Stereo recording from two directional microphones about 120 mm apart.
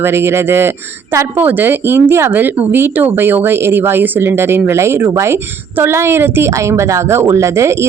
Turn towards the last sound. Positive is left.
turn(degrees=-25)  # may be behind; listen again after turning